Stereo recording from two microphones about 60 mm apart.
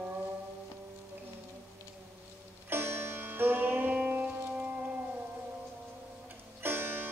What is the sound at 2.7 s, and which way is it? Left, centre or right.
Music, right.